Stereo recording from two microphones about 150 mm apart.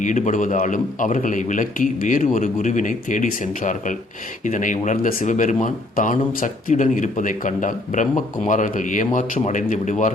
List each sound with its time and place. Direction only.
0.0 s speech: 55° left (ahead or behind)